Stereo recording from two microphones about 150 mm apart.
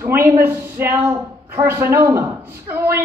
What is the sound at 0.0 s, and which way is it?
Speech, 15° right (ahead or behind).